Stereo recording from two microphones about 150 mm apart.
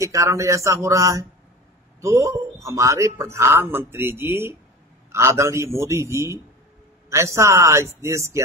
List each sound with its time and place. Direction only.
0.0 s a man's voice: 20° right (ahead or behind)